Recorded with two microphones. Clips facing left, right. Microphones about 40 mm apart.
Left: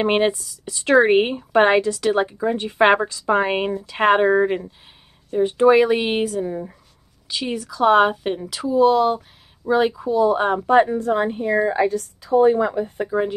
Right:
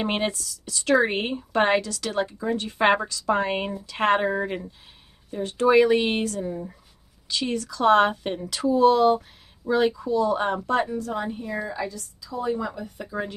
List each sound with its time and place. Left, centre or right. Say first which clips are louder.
0.0 s speech: left 7 dB; centre
9.7 s speech: left 3 dB; centre
10.9 s a woman's voice: left 8 dB; left